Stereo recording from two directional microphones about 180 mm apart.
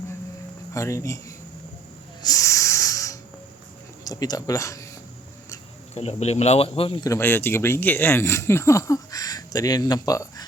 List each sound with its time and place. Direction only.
0.7 s speech: 15° left (ahead or behind)
2.2 s hiss: 20° left (ahead or behind)
4.0 s speech: 20° left (ahead or behind)
5.9 s a man's voice: 35° left (ahead or behind); by 10.4 s 20° left (ahead or behind)